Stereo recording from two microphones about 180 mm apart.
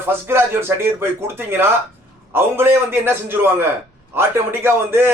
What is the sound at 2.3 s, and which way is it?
A man's voice, 10° right (ahead or behind).